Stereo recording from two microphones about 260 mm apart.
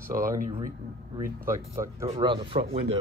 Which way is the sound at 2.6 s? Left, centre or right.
Right.